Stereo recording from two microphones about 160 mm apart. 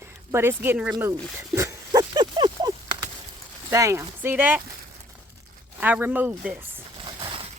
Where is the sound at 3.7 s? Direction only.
20° right (ahead or behind).